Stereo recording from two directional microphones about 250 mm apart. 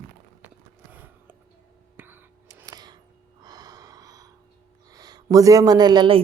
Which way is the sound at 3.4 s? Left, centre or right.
Centre.